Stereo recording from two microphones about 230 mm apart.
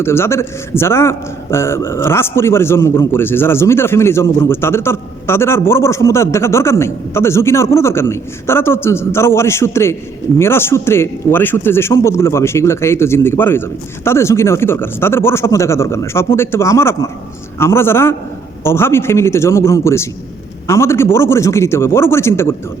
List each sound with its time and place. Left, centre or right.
0.0 s a man's voice: centre